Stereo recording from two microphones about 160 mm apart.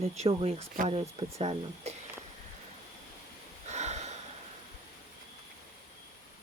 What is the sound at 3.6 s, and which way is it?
Snort, 45° right (ahead or behind).